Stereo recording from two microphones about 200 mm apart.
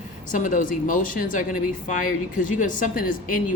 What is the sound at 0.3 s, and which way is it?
A woman's voice, 40° left (ahead or behind).